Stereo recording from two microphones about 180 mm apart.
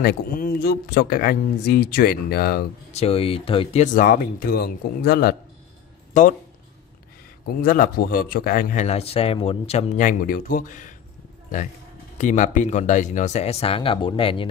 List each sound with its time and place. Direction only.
0.0 s speech: 55° left (ahead or behind)
2.9 s speech: 35° left (ahead or behind)
3.8 s speech: 50° left (ahead or behind)
6.2 s a man's voice: 45° left (ahead or behind)
7.4 s a man's voice: 50° left (ahead or behind); by 14.5 s 30° left (ahead or behind)